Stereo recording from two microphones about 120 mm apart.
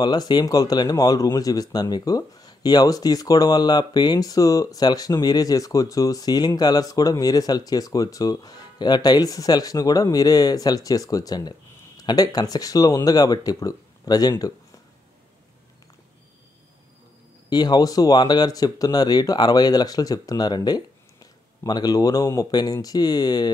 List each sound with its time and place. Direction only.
0.0 s speech: 35° left (ahead or behind)
17.5 s speech: 35° left (ahead or behind)